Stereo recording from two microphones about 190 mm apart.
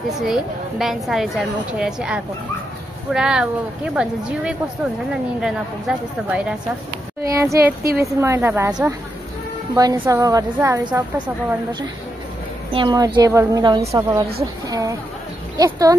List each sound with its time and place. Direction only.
0.2 s a woman's voice: centre (ahead or behind)
7.2 s a woman's voice: 15° right (ahead or behind)
12.7 s a woman's voice: 20° right (ahead or behind)